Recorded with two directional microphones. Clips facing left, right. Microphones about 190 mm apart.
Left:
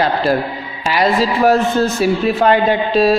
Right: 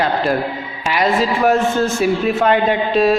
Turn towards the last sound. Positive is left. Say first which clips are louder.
# left 1 dB
turn(degrees=35)  # may be behind; listen again after turning